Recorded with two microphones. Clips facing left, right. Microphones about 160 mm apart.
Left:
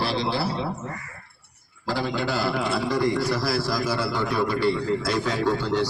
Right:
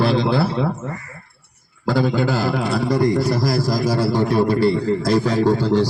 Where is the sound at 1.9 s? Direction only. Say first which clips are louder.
Right 7 dB; 50° right (ahead or behind).